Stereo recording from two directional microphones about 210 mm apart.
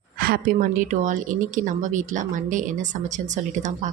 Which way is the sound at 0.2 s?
45° right (ahead or behind).